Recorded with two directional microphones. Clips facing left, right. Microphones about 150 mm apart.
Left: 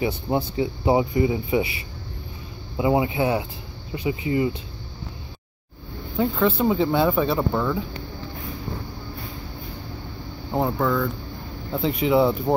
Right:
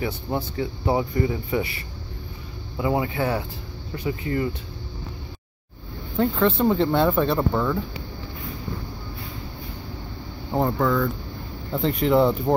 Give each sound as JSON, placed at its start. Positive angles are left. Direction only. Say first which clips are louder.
{"t": 0.0, "sound": "speech", "louder": "left 3 dB", "side_deg": 15}
{"t": 2.8, "sound": "speech", "louder": "left 3 dB", "side_deg": 20}
{"t": 6.1, "sound": "speech", "louder": "even", "side_deg": 5}
{"t": 10.5, "sound": "speech", "louder": "right 1 dB", "side_deg": 0}